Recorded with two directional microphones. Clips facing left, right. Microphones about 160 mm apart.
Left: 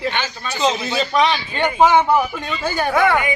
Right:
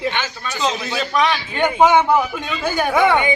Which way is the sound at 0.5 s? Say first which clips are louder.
Left 3 dB; 5° left (ahead or behind).